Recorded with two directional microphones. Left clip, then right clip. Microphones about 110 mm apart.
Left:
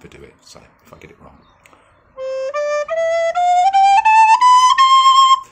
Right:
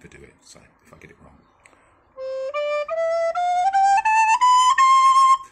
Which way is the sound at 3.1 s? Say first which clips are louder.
Left 7 dB; 55° left (ahead or behind).